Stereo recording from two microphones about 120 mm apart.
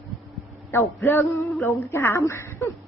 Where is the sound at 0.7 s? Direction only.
20° left (ahead or behind).